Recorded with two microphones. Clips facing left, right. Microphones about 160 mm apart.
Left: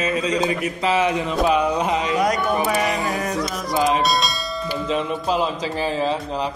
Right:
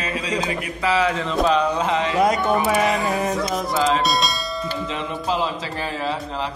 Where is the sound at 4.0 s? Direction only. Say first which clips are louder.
Even; centre (ahead or behind).